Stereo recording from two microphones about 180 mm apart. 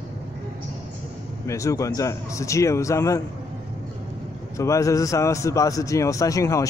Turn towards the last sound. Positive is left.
turn(degrees=15)  # may be behind; listen again after turning